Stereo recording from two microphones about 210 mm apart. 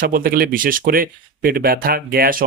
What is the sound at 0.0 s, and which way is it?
Speech, 45° right (ahead or behind).